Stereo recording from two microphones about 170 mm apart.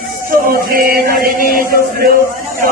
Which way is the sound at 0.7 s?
60° right (ahead or behind).